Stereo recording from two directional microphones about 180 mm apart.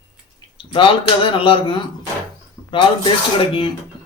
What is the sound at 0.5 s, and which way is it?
Speech, 30° left (ahead or behind).